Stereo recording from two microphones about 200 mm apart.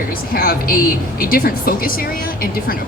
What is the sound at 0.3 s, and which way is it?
A woman's voice, 45° left (ahead or behind).